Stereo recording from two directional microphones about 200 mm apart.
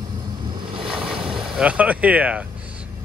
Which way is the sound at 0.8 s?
5° right (ahead or behind).